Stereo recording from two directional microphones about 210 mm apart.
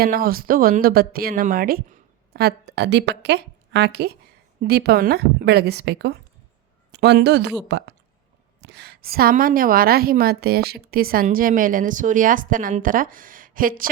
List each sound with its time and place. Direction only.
0.0 s a woman's voice: 45° right (ahead or behind)